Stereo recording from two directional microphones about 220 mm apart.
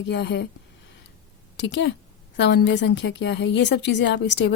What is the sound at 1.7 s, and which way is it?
A woman's voice, 50° left (ahead or behind).